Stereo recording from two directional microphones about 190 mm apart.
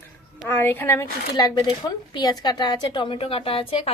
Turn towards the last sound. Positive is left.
turn(degrees=30)  # may be behind; listen again after turning